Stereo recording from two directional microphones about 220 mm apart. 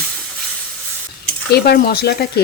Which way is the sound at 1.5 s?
45° left (ahead or behind).